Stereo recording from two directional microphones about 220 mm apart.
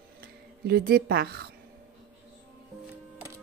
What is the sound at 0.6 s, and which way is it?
Speech, 45° right (ahead or behind).